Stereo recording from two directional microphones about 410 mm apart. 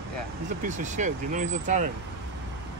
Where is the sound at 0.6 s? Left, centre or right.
Centre.